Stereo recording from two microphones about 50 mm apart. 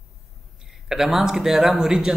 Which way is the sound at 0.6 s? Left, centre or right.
Centre.